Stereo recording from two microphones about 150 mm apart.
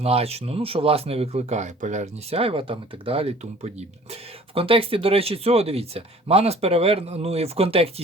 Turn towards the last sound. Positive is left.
turn(degrees=-40)  # may be behind; listen again after turning